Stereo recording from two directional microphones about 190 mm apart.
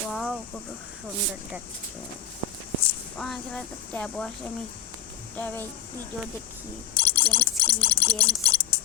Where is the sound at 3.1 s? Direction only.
Centre (ahead or behind).